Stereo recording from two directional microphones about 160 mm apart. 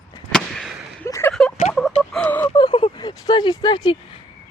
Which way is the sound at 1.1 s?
20° left (ahead or behind).